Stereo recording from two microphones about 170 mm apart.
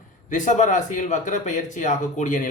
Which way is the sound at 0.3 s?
45° left (ahead or behind).